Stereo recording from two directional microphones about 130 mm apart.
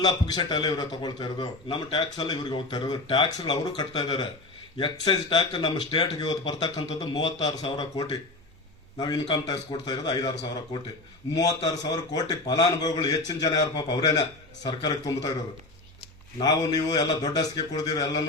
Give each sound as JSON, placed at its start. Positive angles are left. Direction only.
{"t": 0.0, "sound": "speech", "side_deg": 30}
{"t": 9.3, "sound": "speech", "side_deg": 30}
{"t": 16.4, "sound": "speech", "side_deg": 30}